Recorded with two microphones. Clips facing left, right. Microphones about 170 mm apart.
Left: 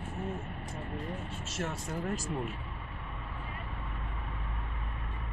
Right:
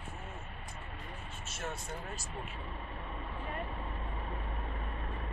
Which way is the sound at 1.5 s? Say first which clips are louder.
Left 4 dB; 90° left.